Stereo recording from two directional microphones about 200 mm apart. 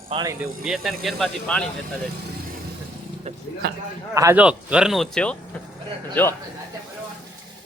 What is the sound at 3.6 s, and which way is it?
Speech, 50° right (ahead or behind).